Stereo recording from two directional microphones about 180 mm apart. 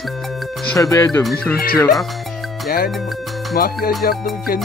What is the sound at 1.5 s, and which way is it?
Music, 55° left (ahead or behind).